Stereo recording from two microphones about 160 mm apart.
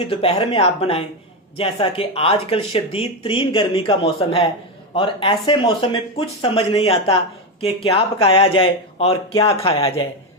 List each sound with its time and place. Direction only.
0.1 s speech: 40° left (ahead or behind)